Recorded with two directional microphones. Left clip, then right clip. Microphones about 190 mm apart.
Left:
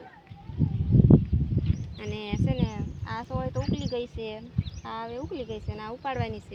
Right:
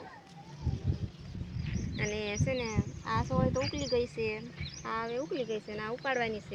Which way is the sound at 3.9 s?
35° left (ahead or behind).